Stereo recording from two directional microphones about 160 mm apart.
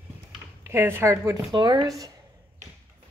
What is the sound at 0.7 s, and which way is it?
Speech, 15° right (ahead or behind).